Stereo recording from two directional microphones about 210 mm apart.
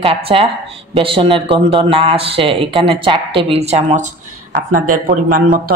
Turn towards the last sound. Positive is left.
turn(degrees=-40)  # may be behind; listen again after turning